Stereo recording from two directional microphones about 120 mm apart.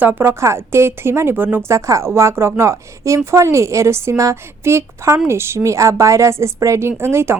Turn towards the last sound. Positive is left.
turn(degrees=-20)  # may be behind; listen again after turning